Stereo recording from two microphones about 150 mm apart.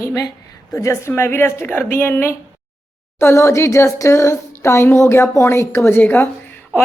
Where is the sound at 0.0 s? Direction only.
20° left (ahead or behind).